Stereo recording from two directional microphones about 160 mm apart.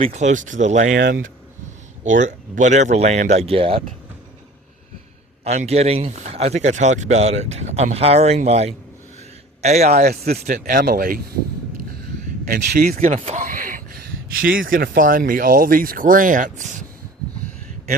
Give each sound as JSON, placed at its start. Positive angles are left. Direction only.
{"t": 0.0, "sound": "speech", "side_deg": -45}
{"t": 0.9, "sound": "speech", "side_deg": -80}
{"t": 2.0, "sound": "speech", "side_deg": -50}
{"t": 5.5, "sound": "speech", "side_deg": -40}
{"t": 10.1, "sound": "speech", "side_deg": -75}
{"t": 10.4, "sound": "speech", "side_deg": -50}
{"t": 12.5, "sound": "speech", "side_deg": -75}
{"t": 13.1, "sound": "speech", "side_deg": -45}